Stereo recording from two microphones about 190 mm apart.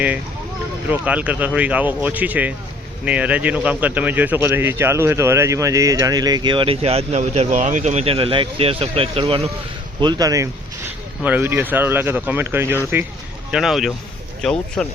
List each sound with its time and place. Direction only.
0.9 s speech: 5° right (ahead or behind)